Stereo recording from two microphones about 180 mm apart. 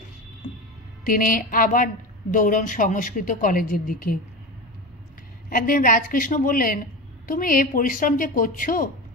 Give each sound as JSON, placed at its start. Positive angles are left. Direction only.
{"t": 1.0, "sound": "speech", "side_deg": 50}
{"t": 5.5, "sound": "speech", "side_deg": 50}